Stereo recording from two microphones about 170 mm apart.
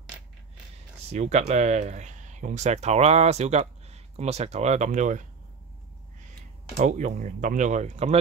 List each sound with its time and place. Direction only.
1.1 s speech: 40° right (ahead or behind)
6.8 s speech: 45° right (ahead or behind)